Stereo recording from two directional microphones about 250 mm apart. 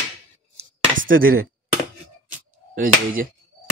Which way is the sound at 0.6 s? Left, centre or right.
Right.